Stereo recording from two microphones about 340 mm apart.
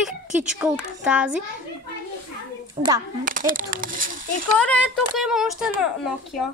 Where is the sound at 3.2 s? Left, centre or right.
Right.